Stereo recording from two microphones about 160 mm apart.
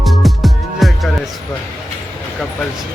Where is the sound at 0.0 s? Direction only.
Centre (ahead or behind).